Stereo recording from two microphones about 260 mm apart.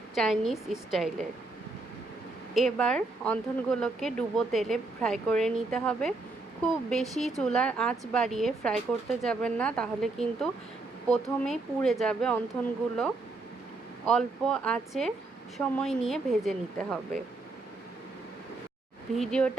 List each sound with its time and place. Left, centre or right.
0.1 s speech: centre
2.6 s speech: centre
14.1 s speech: centre
19.1 s speech: centre